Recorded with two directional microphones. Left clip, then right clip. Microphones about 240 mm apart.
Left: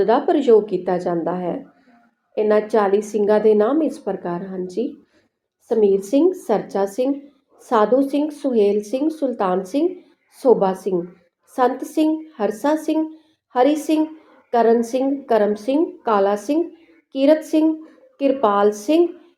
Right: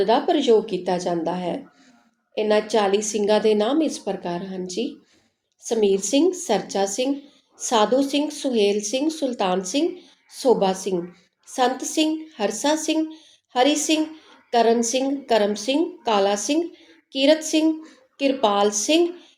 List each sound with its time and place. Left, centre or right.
0.0 s a woman's voice: left